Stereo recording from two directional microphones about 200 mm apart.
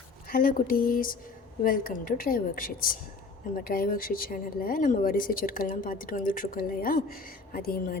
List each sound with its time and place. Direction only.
0.3 s speech: 45° left (ahead or behind)